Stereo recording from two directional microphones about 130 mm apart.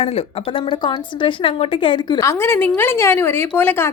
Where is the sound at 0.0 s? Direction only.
50° left (ahead or behind).